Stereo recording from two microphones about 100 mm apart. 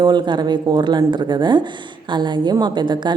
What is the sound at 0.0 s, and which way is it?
A woman's voice, 50° right (ahead or behind).